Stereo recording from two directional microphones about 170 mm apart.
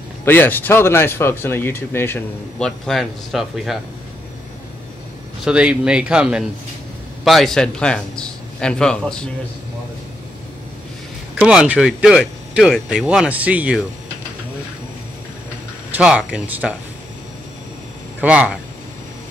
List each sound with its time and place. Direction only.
0.2 s speech: 10° left (ahead or behind)
2.9 s speech: centre (ahead or behind)
5.4 s speech: 5° right (ahead or behind)
11.4 s speech: 5° right (ahead or behind)
15.9 s speech: 5° right (ahead or behind)
18.2 s speech: 5° right (ahead or behind)